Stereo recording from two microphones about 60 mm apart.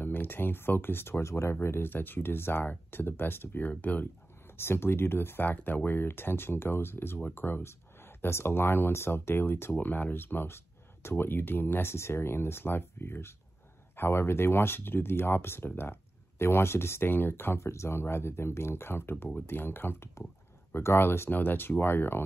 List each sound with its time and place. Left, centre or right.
0.0 s speech: left
4.6 s speech: left